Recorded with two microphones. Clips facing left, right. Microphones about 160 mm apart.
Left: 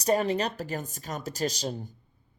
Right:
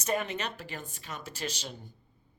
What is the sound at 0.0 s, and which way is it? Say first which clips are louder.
Speech: left 7 dB; 35° left (ahead or behind).